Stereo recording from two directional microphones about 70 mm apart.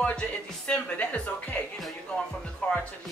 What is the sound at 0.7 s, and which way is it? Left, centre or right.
Speech, centre.